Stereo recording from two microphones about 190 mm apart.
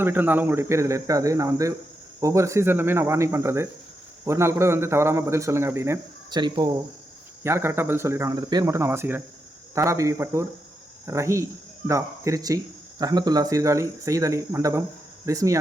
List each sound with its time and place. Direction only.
0.0 s a man's voice: 10° right (ahead or behind)